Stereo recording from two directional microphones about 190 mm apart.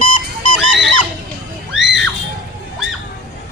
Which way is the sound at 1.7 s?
5° right (ahead or behind).